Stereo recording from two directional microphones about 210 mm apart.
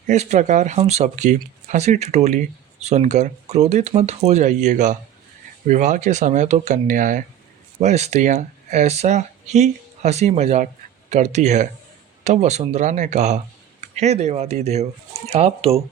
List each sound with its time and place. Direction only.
0.1 s speech: 35° right (ahead or behind)